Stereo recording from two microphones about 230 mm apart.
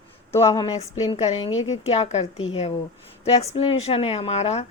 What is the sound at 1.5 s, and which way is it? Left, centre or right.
Speech, left.